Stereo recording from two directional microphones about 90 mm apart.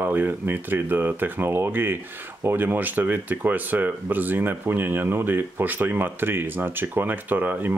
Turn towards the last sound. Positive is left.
turn(degrees=-20)  # may be behind; listen again after turning